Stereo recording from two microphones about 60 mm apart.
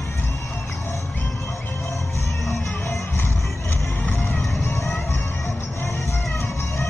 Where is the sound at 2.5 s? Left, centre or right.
Left.